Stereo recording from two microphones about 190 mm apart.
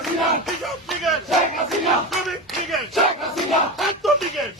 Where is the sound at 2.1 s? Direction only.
Centre (ahead or behind).